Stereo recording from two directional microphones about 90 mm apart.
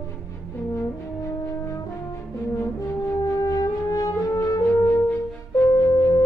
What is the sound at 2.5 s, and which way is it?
French horn, 30° left (ahead or behind).